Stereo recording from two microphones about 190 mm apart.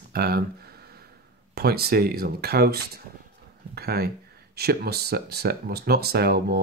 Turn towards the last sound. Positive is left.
turn(degrees=-55)  # may be behind; listen again after turning